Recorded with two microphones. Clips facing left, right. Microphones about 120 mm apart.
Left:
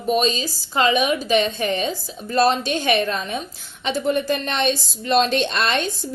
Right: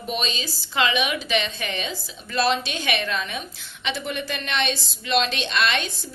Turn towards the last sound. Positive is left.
turn(degrees=45)  # may be behind; listen again after turning